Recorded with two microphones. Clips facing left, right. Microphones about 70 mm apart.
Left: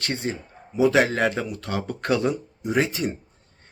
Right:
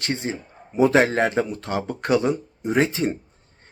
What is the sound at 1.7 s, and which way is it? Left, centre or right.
Speech, centre.